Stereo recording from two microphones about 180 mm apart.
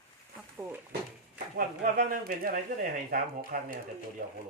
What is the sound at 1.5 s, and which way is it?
Speech, 55° right (ahead or behind).